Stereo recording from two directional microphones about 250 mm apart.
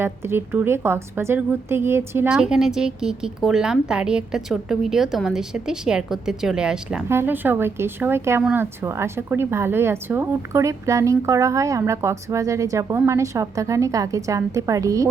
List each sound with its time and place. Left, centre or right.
0.0 s a woman's voice: centre